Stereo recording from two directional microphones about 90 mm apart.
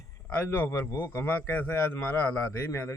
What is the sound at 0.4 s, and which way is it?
A man's voice, 25° left (ahead or behind).